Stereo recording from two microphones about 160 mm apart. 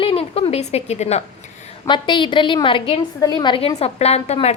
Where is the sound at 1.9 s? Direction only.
30° left (ahead or behind).